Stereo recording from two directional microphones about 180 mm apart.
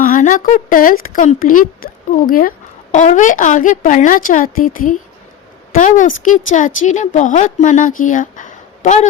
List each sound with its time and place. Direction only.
0.0 s a woman's voice: 45° left (ahead or behind)